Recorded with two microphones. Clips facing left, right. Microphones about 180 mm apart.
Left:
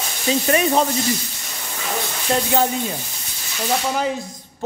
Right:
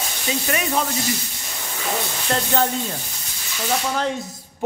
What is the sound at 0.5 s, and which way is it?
Speech, 35° left (ahead or behind).